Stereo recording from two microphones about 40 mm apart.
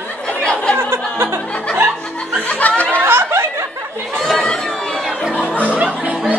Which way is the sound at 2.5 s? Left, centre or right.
Left.